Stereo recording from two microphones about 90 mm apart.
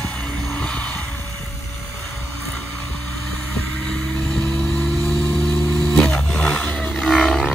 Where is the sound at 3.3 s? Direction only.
5° left (ahead or behind).